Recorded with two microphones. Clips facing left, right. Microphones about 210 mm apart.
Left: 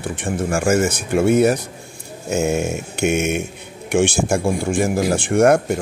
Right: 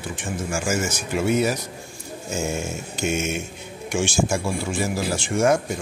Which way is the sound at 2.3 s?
65° left (ahead or behind).